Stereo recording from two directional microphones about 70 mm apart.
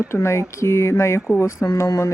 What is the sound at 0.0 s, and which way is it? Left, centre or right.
Speech, left.